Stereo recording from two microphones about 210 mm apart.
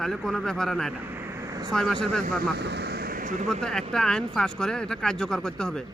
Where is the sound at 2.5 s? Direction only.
50° right (ahead or behind); by 3.5 s 35° right (ahead or behind).